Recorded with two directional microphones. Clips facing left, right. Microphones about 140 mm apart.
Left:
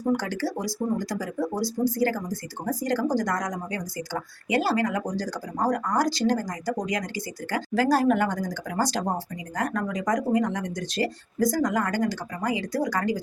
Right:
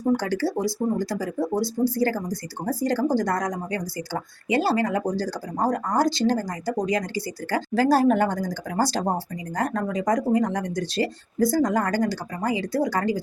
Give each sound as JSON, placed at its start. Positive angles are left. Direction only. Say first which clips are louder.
{"t": 0.2, "sound": "speech", "louder": "right 4 dB", "side_deg": -30}